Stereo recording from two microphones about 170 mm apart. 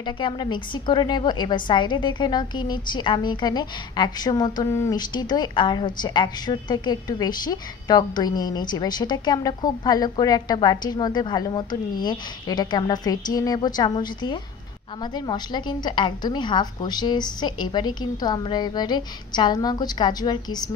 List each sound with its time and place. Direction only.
0.0 s a woman's voice: 25° left (ahead or behind)